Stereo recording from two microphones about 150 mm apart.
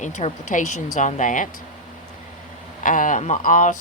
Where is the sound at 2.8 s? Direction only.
60° left (ahead or behind).